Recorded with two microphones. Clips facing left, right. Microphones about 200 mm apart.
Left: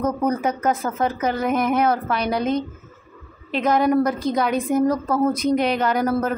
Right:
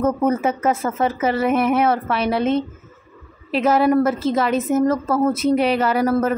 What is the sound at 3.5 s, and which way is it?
A woman's voice, 5° right (ahead or behind).